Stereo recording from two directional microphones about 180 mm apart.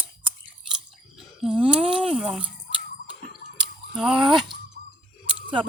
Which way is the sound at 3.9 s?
Centre (ahead or behind).